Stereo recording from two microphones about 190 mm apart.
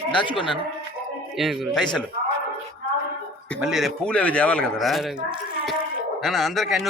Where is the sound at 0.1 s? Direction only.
25° left (ahead or behind).